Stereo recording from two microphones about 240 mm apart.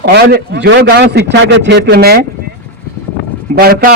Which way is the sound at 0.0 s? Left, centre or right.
Right.